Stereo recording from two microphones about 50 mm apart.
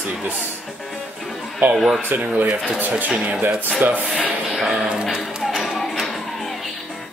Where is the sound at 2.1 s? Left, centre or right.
Right.